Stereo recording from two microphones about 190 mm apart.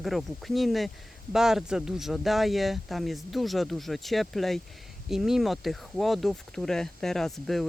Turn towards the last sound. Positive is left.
turn(degrees=0)  # may be behind; listen again after turning